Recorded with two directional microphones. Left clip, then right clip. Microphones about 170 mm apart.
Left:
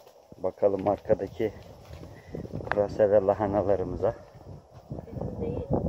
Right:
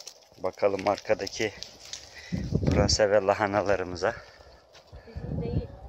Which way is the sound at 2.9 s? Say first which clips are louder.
Left 1 dB; 20° left (ahead or behind).